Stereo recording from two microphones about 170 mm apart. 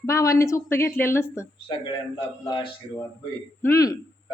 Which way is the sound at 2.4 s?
30° left (ahead or behind).